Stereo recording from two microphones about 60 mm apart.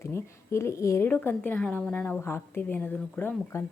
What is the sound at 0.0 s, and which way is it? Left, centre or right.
A woman's voice, left.